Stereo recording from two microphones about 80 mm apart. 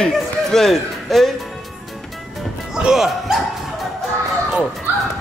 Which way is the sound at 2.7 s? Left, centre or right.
Centre.